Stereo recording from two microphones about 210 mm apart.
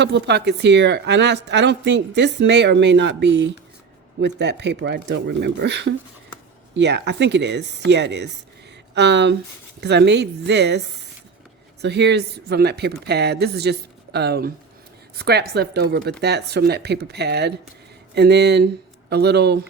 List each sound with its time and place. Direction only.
0.0 s a woman's voice: 55° right (ahead or behind)